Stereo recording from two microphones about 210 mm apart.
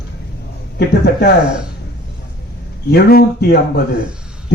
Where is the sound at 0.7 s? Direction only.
50° left (ahead or behind).